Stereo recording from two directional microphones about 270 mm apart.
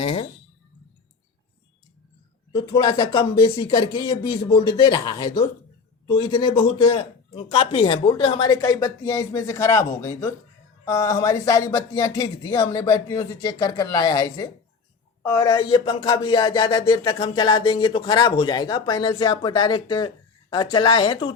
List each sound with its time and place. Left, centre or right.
0.0 s speech: left
2.5 s speech: centre